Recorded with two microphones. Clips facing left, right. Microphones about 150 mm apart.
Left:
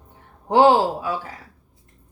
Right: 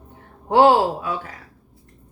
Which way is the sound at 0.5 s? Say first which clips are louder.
Even; 20° left (ahead or behind).